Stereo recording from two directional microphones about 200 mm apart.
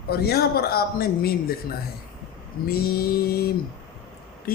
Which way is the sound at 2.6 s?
50° left (ahead or behind).